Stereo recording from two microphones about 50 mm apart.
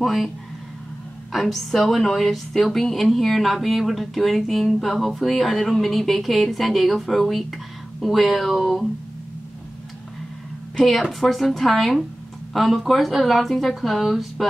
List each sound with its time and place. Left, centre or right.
0.0 s a woman's voice: centre
1.3 s a woman's voice: centre
10.9 s a woman's voice: centre